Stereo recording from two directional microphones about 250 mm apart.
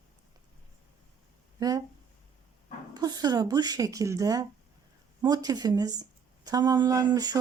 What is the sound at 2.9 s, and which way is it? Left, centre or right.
Speech, centre.